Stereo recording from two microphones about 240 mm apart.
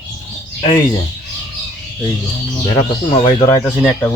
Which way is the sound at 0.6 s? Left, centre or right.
Centre.